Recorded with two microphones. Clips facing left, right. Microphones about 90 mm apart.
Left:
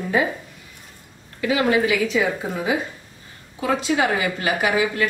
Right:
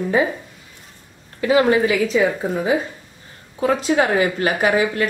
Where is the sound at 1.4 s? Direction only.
35° right (ahead or behind).